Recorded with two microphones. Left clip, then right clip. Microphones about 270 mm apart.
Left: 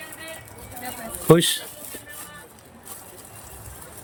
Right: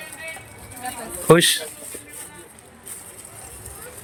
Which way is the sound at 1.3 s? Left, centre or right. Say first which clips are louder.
Right 2 dB; centre.